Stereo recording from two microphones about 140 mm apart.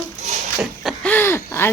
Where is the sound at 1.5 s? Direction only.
15° left (ahead or behind).